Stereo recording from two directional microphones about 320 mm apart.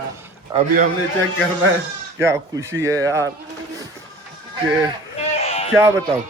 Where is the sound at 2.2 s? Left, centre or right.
Centre.